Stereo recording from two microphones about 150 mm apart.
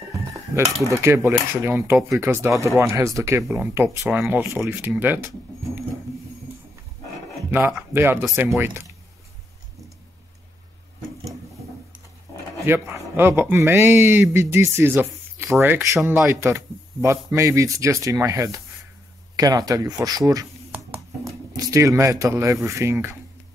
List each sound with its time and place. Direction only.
0.9 s a man's voice: 15° right (ahead or behind)
7.5 s a man's voice: 10° right (ahead or behind)
12.9 s a man's voice: 15° right (ahead or behind)
21.5 s speech: 20° right (ahead or behind)